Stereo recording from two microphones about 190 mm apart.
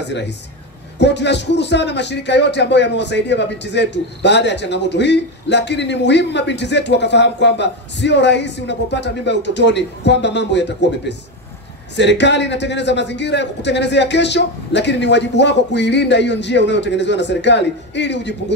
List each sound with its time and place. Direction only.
0.0 s a man's voice: 65° left (ahead or behind)